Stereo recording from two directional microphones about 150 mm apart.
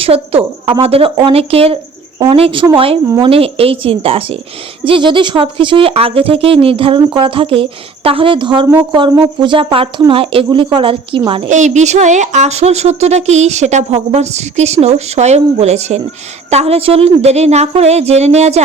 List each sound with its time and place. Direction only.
0.0 s speech: 40° right (ahead or behind)
11.4 s speech: 55° right (ahead or behind)